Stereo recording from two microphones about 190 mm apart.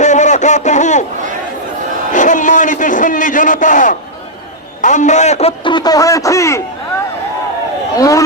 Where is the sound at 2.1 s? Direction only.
40° left (ahead or behind); by 6.6 s 15° left (ahead or behind).